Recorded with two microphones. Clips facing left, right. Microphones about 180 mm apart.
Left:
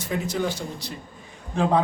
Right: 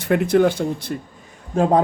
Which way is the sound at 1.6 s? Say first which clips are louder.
Right 5 dB; 45° right (ahead or behind).